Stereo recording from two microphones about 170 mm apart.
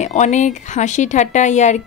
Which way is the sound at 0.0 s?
45° left (ahead or behind).